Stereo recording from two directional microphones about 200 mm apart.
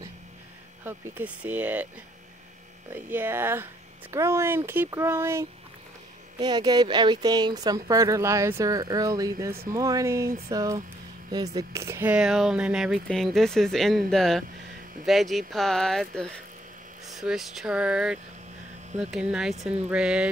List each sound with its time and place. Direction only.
0.8 s speech: 10° right (ahead or behind)
2.9 s speech: 10° right (ahead or behind)
19.5 s speech: 35° right (ahead or behind)
19.9 s speech: 5° right (ahead or behind)